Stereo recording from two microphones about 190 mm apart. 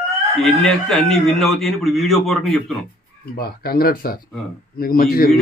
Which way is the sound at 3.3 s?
55° left (ahead or behind).